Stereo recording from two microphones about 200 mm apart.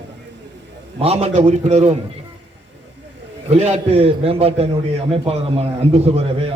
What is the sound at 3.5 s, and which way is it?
A man's voice, 35° right (ahead or behind).